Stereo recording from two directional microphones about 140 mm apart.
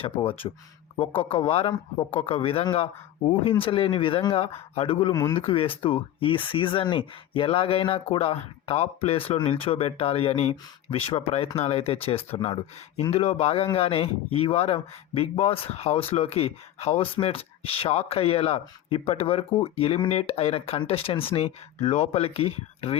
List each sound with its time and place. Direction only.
0.0 s speech: 40° left (ahead or behind)